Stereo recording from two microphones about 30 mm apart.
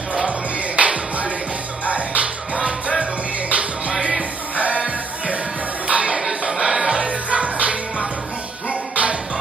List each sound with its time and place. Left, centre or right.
0.3 s music: right
6.6 s music: right